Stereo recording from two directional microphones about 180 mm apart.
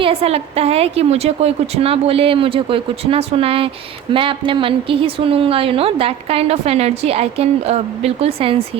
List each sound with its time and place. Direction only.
0.0 s a woman's voice: 30° right (ahead or behind)